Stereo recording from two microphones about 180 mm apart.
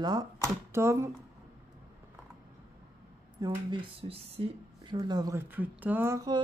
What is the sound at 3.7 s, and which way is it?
Speech, 30° right (ahead or behind).